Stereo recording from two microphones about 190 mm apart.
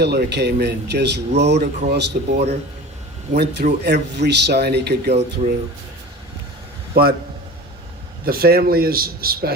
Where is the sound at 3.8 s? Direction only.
60° right (ahead or behind).